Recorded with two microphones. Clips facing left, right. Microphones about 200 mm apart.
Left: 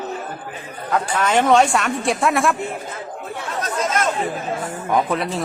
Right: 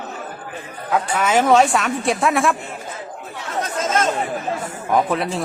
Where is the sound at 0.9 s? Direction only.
5° right (ahead or behind).